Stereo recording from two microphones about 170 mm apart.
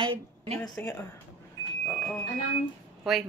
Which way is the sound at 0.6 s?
5° left (ahead or behind).